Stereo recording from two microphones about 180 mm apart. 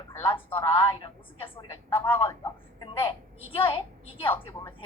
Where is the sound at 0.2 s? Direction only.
30° left (ahead or behind).